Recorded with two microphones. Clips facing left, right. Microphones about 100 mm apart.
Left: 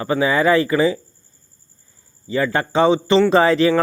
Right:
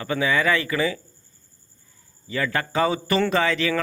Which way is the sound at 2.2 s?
30° left (ahead or behind).